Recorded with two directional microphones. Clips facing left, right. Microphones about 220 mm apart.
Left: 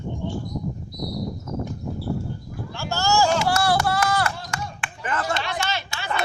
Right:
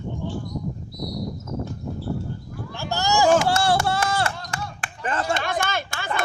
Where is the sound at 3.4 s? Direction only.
25° right (ahead or behind).